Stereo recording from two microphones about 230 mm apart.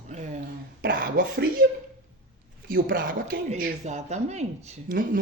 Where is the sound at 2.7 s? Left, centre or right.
Right.